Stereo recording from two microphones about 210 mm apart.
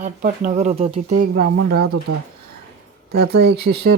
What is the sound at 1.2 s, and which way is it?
Speech, 45° right (ahead or behind).